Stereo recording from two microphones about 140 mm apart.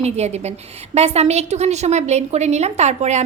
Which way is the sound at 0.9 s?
50° right (ahead or behind).